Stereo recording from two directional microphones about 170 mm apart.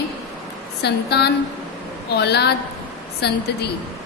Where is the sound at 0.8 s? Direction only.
75° left (ahead or behind).